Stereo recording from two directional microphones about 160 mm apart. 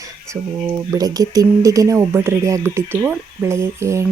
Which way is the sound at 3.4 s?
15° right (ahead or behind).